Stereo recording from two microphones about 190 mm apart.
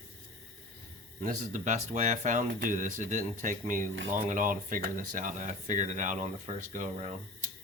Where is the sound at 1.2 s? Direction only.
40° right (ahead or behind).